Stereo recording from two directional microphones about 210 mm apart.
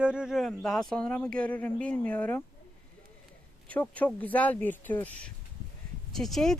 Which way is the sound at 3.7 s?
5° left (ahead or behind).